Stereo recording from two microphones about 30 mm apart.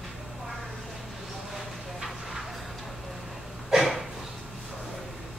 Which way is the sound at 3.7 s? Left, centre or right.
Centre.